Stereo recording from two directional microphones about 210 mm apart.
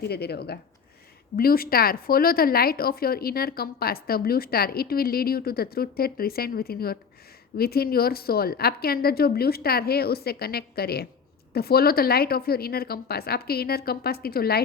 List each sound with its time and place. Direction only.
0.0 s speech: 50° left (ahead or behind)